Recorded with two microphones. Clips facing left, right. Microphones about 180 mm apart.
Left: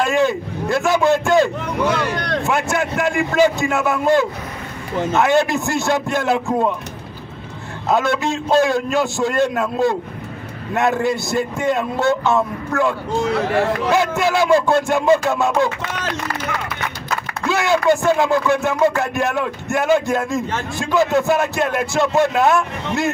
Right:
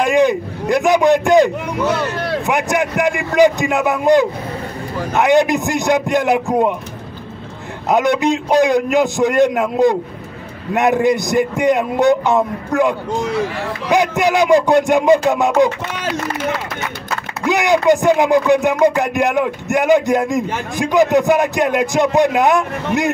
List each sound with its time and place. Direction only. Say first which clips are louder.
0.0 s a man's voice: right 4 dB; 15° right (ahead or behind)
1.9 s speech: right 3 dB; 5° right (ahead or behind)
2.4 s music: right 3 dB; 15° right (ahead or behind)
7.9 s music: right 4 dB; 20° right (ahead or behind)
17.5 s music: right 3 dB; 15° right (ahead or behind)